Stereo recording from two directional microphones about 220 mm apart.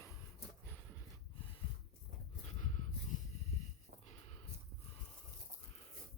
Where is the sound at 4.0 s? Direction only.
30° left (ahead or behind).